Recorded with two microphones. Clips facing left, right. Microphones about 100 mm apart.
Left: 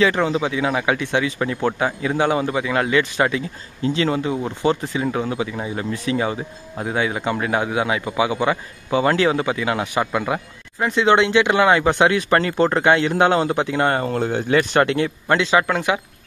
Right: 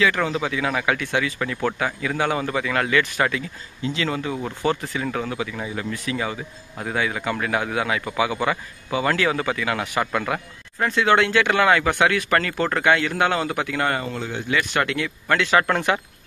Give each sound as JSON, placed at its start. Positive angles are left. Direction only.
{"t": 0.0, "sound": "a man's voice", "side_deg": 25}
{"t": 14.0, "sound": "speech", "side_deg": 50}
{"t": 14.6, "sound": "speech", "side_deg": 35}
{"t": 15.3, "sound": "a man's voice", "side_deg": 20}
{"t": 15.6, "sound": "speech", "side_deg": 10}